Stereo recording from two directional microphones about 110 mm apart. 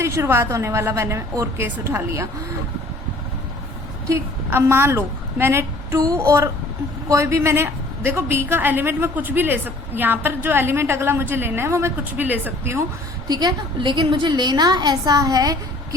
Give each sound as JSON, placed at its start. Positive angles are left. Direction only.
{"t": 0.0, "sound": "a woman's voice", "side_deg": -25}
{"t": 4.1, "sound": "a woman's voice", "side_deg": -20}
{"t": 13.2, "sound": "a woman's voice", "side_deg": -35}